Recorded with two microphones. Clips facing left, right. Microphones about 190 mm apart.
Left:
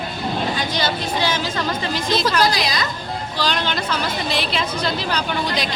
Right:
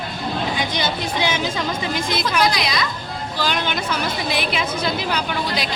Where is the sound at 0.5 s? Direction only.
10° right (ahead or behind).